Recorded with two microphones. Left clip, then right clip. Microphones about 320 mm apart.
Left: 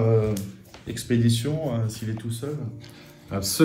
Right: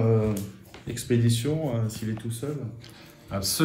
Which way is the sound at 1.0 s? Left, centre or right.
Left.